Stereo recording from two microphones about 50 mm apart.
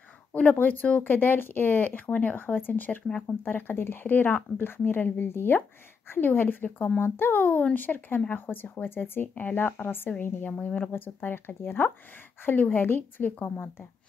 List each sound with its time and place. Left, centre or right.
0.3 s speech: left
1.0 s speech: left
3.1 s speech: left
3.4 s speech: left
9.3 s speech: left
10.6 s speech: left
10.9 s speech: left